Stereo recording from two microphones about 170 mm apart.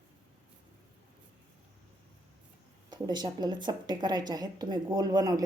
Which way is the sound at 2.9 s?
25° right (ahead or behind).